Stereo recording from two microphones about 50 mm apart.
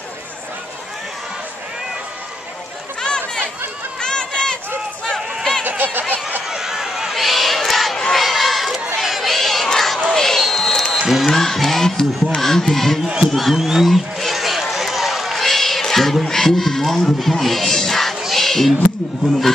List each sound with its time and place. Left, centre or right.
4.0 s run: centre
5.6 s a sound: right
6.5 s crowd: centre
11.0 s music: centre
11.2 s music: centre
12.4 s speech: centre
14.2 s a sound: centre